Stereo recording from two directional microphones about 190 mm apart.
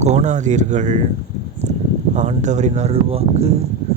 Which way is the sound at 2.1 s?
35° right (ahead or behind).